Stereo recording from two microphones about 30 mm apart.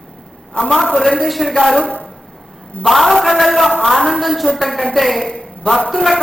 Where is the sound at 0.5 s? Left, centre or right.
Left.